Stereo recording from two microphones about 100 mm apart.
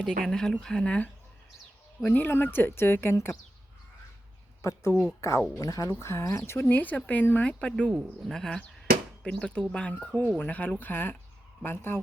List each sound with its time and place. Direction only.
0.0 s a woman's voice: 5° left (ahead or behind); by 3.3 s 25° left (ahead or behind)
4.6 s a woman's voice: 30° left (ahead or behind)